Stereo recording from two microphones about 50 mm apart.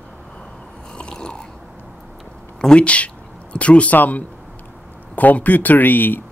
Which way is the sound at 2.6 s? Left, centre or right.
Centre.